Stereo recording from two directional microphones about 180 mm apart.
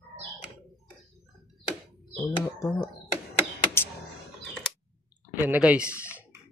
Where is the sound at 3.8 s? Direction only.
15° left (ahead or behind).